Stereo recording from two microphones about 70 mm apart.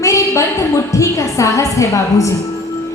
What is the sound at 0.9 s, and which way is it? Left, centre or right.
A woman's voice, left.